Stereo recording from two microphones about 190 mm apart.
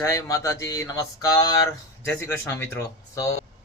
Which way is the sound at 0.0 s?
15° left (ahead or behind).